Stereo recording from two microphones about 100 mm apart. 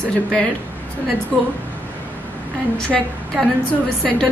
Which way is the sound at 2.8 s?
10° left (ahead or behind).